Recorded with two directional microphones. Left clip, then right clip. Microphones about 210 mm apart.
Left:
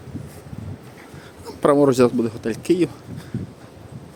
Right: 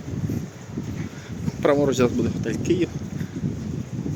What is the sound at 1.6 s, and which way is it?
Speech, 30° left (ahead or behind).